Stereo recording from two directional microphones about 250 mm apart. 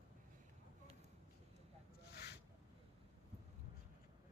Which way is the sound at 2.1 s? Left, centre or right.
Left.